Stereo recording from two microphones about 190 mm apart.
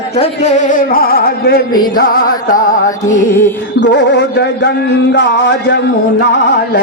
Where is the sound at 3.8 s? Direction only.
65° left (ahead or behind).